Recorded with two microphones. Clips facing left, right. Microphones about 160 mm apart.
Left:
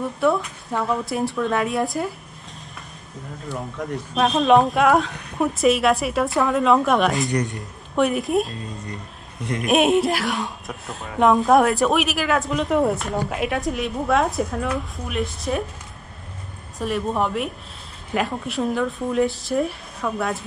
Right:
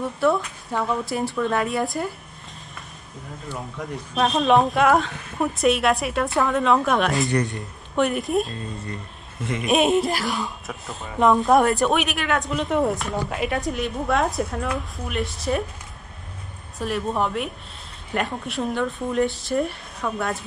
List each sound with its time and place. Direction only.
0.0 s speech: centre (ahead or behind)
3.4 s speech: centre (ahead or behind)
16.7 s speech: centre (ahead or behind)